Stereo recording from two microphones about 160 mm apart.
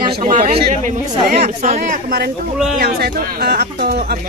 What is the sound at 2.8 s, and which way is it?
Speech, 65° right (ahead or behind).